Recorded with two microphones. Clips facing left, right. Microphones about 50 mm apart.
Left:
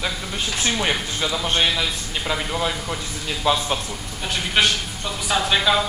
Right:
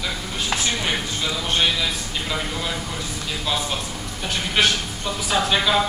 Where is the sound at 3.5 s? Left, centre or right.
Left.